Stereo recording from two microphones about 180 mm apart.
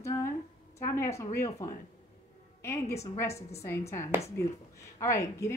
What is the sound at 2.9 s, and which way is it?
Speech, 40° left (ahead or behind).